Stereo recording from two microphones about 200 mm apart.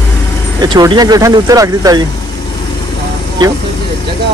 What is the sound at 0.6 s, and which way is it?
Speech, 20° right (ahead or behind).